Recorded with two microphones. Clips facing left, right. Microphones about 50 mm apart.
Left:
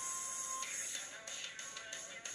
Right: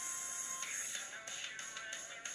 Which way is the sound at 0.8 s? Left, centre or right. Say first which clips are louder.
Right 2 dB; right.